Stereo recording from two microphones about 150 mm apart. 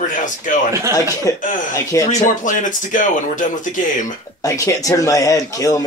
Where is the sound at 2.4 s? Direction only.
60° left (ahead or behind).